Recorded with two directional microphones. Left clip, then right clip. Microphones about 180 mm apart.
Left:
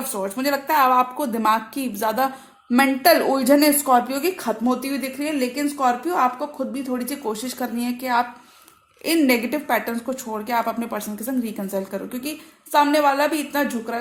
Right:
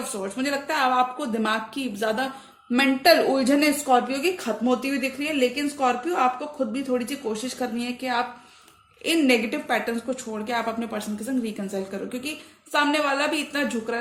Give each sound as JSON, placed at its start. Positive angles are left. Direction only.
{"t": 0.1, "sound": "a woman's voice", "side_deg": 45}